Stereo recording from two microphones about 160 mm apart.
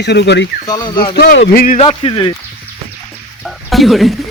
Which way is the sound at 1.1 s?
85° left.